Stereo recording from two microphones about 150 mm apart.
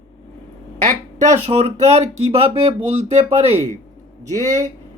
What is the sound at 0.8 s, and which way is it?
Speech, 55° right (ahead or behind).